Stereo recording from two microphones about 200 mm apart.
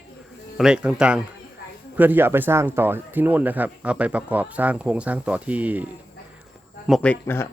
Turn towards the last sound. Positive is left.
turn(degrees=10)  # may be behind; listen again after turning